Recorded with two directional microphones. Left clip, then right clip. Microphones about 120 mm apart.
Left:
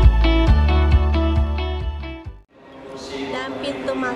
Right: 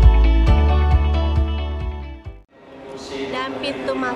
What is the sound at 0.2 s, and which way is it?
Music, centre (ahead or behind).